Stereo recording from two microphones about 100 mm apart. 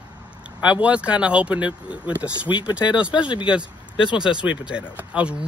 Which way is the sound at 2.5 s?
50° left (ahead or behind).